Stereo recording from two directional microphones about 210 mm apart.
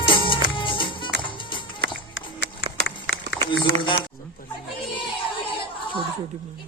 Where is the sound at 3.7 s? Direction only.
50° right (ahead or behind).